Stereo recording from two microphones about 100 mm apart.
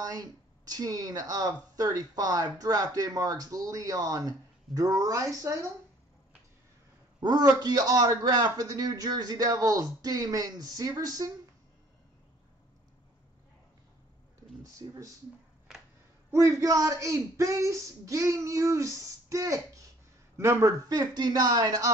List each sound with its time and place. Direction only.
0.0 s speech: 40° right (ahead or behind)
7.2 s a man's voice: 40° right (ahead or behind)
14.6 s a sound: 35° right (ahead or behind)
16.3 s speech: 30° right (ahead or behind)
20.9 s speech: 45° right (ahead or behind)